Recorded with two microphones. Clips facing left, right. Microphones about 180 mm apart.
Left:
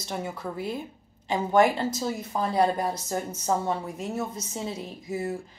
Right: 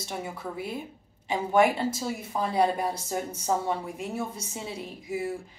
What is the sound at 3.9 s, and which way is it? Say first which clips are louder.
A woman's voice: left 2 dB; 40° left (ahead or behind).